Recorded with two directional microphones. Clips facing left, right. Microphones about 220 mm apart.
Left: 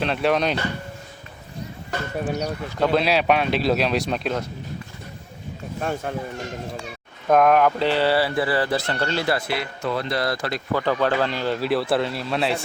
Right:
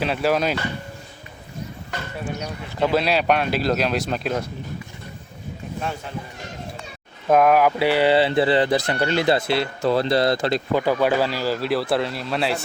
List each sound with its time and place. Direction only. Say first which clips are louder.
0.0 s speech: even; 5° right (ahead or behind)
2.8 s speech: even; centre (ahead or behind)
5.8 s speech: left 5 dB; 50° left (ahead or behind)
7.3 s speech: right 1 dB; 5° right (ahead or behind); by 10.8 s 25° right (ahead or behind)
10.8 s speech: even; 10° right (ahead or behind)